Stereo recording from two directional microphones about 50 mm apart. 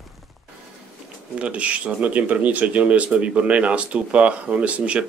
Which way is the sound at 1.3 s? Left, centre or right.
Right.